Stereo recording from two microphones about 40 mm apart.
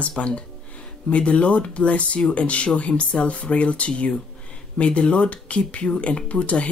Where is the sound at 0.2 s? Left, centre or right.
Left.